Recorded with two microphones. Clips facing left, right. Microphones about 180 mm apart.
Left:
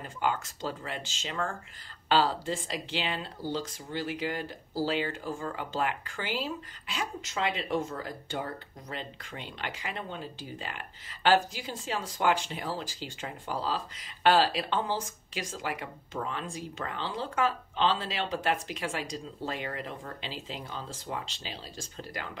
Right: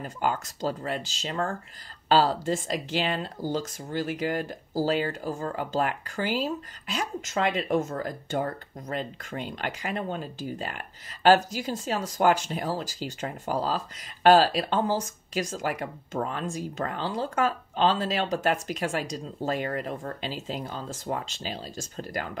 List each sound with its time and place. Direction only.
0.0 s speech: 40° right (ahead or behind)